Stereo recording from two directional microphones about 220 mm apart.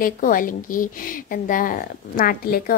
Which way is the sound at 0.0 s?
40° left (ahead or behind).